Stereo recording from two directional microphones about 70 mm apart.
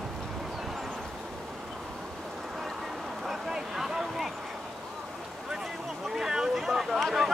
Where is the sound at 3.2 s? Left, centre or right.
Centre.